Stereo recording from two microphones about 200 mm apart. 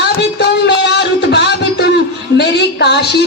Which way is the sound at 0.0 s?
55° left (ahead or behind).